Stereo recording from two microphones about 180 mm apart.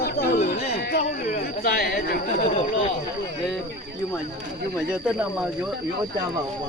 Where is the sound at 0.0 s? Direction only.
60° left (ahead or behind).